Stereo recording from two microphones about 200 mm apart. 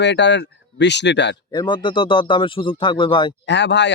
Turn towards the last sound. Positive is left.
turn(degrees=60)  # may be behind; listen again after turning